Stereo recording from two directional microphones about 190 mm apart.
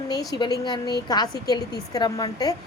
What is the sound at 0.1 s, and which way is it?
A woman's voice, 20° left (ahead or behind).